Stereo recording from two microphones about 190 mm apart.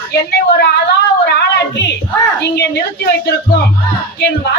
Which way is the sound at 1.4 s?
65° left (ahead or behind).